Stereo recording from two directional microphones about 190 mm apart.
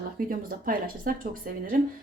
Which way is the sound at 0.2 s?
45° right (ahead or behind).